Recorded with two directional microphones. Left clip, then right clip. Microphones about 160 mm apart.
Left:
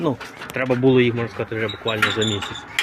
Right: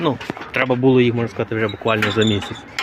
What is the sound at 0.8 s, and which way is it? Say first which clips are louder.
Speech: even; 20° right (ahead or behind).